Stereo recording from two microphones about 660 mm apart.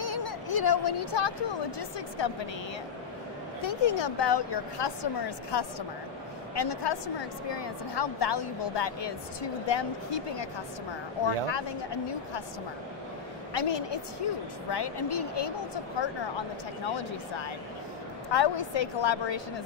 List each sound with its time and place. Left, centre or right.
0.0 s a sound: left
1.8 s a woman's voice: left
3.6 s a woman's voice: left
13.5 s a woman's voice: left